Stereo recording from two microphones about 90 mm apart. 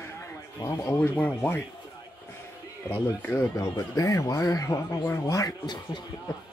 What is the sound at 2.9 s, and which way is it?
Speech, 20° left (ahead or behind).